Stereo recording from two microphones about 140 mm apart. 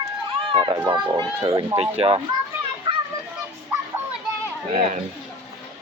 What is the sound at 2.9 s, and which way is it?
Children playing, 35° right (ahead or behind).